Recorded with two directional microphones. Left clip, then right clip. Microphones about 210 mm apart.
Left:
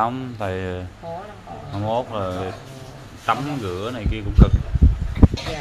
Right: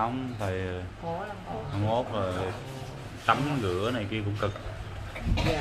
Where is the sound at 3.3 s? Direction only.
25° left (ahead or behind).